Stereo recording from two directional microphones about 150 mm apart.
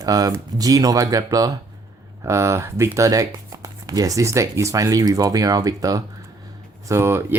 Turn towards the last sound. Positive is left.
turn(degrees=-15)  # may be behind; listen again after turning